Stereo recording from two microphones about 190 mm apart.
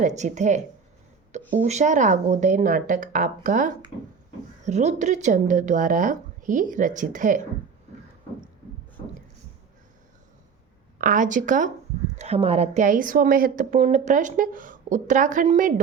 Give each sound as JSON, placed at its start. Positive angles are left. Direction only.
{"t": 0.2, "sound": "a woman's voice", "side_deg": -40}
{"t": 10.9, "sound": "a woman's voice", "side_deg": -45}